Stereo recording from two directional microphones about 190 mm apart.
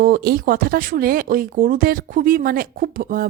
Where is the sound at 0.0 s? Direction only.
50° right (ahead or behind).